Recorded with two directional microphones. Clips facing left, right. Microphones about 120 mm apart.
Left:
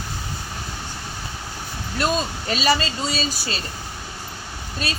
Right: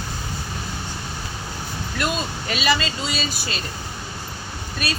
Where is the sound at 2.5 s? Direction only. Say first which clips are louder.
Left 2 dB; 35° left (ahead or behind).